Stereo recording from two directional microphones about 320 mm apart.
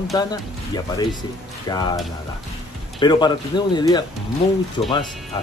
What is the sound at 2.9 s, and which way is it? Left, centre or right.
Speech, centre.